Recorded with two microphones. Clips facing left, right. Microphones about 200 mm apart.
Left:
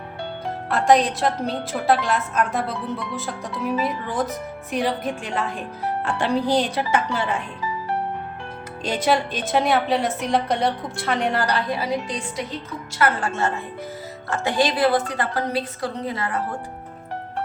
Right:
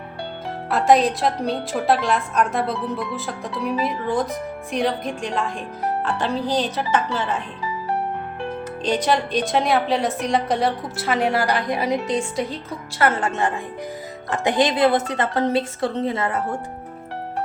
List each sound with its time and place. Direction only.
0.7 s a woman's voice: centre (ahead or behind)
8.8 s a woman's voice: 10° left (ahead or behind); by 16.4 s 25° right (ahead or behind)